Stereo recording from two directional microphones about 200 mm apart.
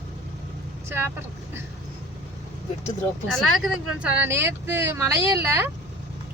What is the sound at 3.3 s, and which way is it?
Speech, 5° right (ahead or behind).